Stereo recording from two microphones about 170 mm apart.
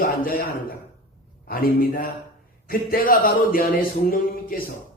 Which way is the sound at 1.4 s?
60° left (ahead or behind).